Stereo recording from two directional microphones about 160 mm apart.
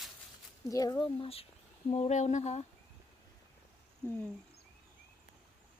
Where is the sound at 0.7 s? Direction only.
25° left (ahead or behind); by 2.7 s 45° left (ahead or behind).